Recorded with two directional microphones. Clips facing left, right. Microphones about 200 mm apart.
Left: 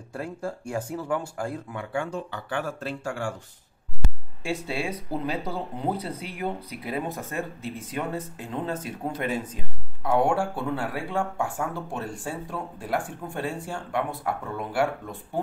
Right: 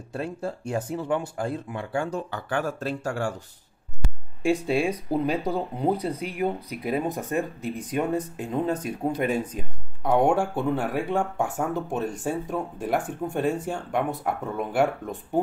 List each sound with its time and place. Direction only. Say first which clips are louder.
0.1 s speech: right 2 dB; 25° right (ahead or behind)
1.9 s speech: right 2 dB; 40° right (ahead or behind)
4.4 s speech: right 7 dB; 15° right (ahead or behind)